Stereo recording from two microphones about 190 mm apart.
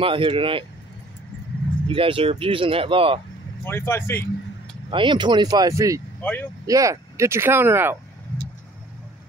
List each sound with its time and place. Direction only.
0.0 s speech: 25° right (ahead or behind)
1.9 s speech: 30° right (ahead or behind)
3.6 s speech: 10° left (ahead or behind)
4.9 s speech: 25° right (ahead or behind)